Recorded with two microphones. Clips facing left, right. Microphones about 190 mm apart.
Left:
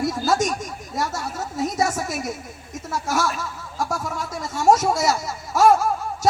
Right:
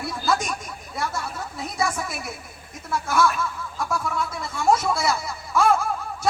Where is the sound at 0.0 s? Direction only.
40° left (ahead or behind).